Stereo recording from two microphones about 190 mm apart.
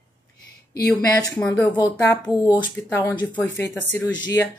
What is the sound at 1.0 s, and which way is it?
Speech, 20° left (ahead or behind).